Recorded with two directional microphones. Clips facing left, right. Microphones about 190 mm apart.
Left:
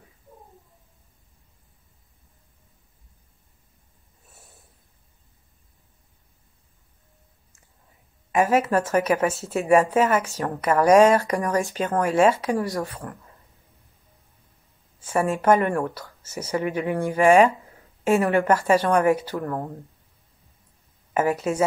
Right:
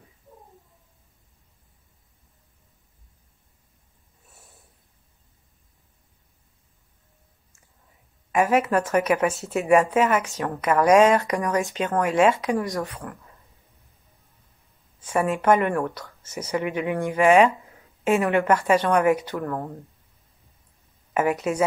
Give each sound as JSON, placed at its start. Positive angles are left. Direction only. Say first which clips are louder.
{"t": 8.3, "sound": "a woman's voice", "louder": "even", "side_deg": 30}
{"t": 15.2, "sound": "a woman's voice", "louder": "left 1 dB", "side_deg": 40}
{"t": 21.1, "sound": "a sound", "louder": "even", "side_deg": 30}